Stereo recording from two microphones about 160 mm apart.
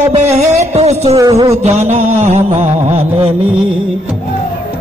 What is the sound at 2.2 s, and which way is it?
Music, 40° right (ahead or behind).